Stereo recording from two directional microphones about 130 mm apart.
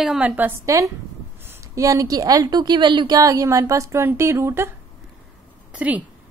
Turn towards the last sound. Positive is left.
turn(degrees=-10)  # may be behind; listen again after turning